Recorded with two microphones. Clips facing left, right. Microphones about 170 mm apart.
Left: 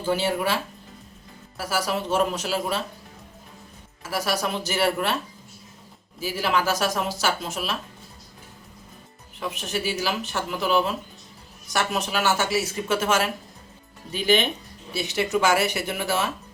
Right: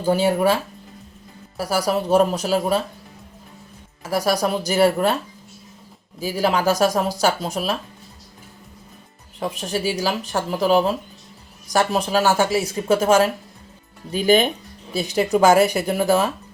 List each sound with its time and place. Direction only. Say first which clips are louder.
0.0 s speech: right 6 dB; 40° right (ahead or behind)
1.5 s speech: right 5 dB; 40° right (ahead or behind)
4.1 s speech: right 6 dB; 40° right (ahead or behind)
6.4 s speech: right 6 dB; 40° right (ahead or behind)
9.4 s speech: right 5 dB; 35° right (ahead or behind)